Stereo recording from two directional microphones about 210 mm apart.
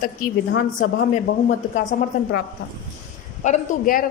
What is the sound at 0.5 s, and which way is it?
Speech, 50° left (ahead or behind).